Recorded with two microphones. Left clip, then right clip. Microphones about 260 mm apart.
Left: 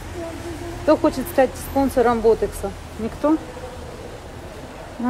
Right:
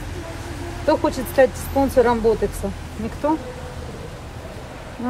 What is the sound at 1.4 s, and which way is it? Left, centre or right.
Speech, centre.